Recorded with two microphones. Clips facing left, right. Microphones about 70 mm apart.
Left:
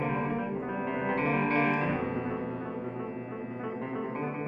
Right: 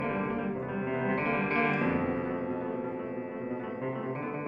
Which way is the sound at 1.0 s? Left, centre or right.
Centre.